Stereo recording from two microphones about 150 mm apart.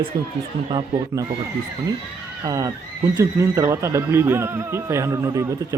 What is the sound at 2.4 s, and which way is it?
Speech, 25° right (ahead or behind).